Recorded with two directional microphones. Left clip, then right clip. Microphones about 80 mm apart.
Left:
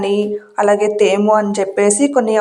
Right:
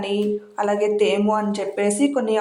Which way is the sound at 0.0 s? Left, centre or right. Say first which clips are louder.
Left 6 dB; left.